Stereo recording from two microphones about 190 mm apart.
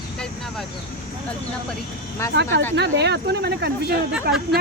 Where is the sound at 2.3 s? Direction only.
65° right (ahead or behind).